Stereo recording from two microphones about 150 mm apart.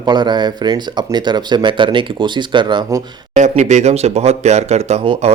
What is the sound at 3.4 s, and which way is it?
Speech, 50° right (ahead or behind).